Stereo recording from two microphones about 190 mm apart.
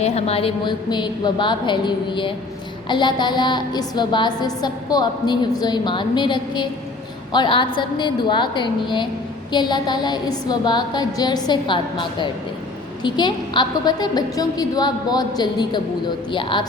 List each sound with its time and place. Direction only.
0.0 s a woman's voice: 35° left (ahead or behind)